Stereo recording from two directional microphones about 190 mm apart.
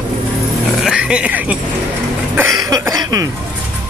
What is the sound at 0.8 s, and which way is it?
Dog, 5° right (ahead or behind).